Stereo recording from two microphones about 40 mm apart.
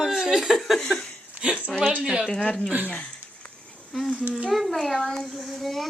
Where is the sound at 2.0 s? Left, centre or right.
Centre.